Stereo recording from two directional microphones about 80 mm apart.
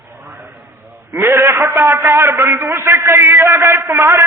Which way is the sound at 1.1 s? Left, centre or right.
Right.